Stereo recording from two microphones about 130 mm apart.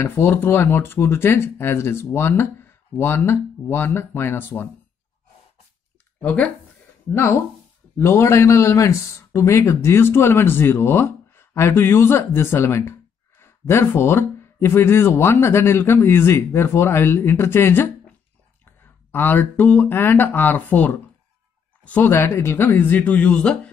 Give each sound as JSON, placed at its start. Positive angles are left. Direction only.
{"t": 0.0, "sound": "speech", "side_deg": 15}
{"t": 6.2, "sound": "speech", "side_deg": 10}
{"t": 8.0, "sound": "a man's voice", "side_deg": 20}